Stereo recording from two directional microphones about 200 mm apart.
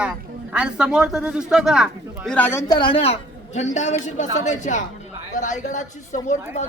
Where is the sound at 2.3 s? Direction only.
10° left (ahead or behind).